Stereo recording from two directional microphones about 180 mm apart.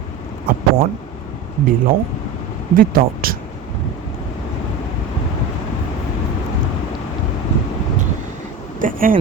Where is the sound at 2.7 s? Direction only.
50° right (ahead or behind).